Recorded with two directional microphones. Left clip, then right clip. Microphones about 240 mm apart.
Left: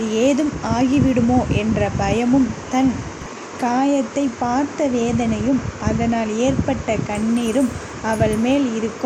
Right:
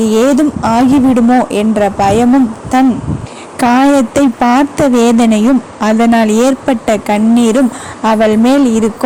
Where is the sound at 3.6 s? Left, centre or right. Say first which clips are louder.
Right 10 dB; right.